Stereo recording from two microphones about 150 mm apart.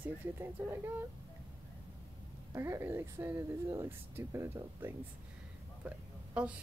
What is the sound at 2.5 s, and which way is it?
Speech, 20° right (ahead or behind).